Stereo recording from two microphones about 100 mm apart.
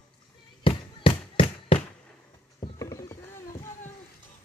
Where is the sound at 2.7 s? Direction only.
35° left (ahead or behind).